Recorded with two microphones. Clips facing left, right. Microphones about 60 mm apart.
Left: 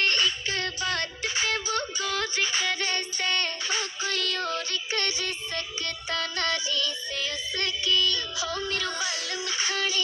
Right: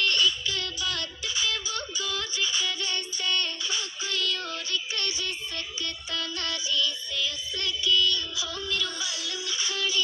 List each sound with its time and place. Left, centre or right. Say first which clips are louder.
0.0 s music: even; left